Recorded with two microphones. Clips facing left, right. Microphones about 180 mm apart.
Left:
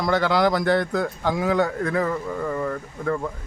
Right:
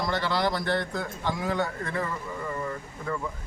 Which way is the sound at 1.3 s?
65° left (ahead or behind).